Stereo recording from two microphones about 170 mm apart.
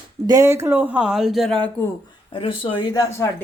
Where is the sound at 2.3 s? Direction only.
30° left (ahead or behind).